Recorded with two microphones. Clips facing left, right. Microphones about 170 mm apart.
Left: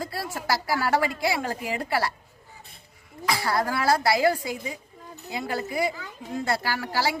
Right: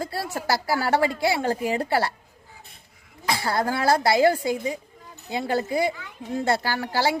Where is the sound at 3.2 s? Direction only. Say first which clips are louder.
Right 1 dB; 25° right (ahead or behind).